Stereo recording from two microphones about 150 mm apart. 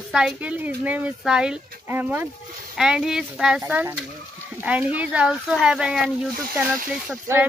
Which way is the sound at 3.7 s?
15° right (ahead or behind).